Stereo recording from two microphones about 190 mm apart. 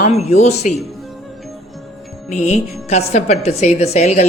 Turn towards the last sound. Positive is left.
turn(degrees=35)  # may be behind; listen again after turning